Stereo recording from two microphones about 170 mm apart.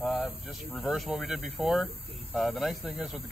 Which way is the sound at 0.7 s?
Centre (ahead or behind).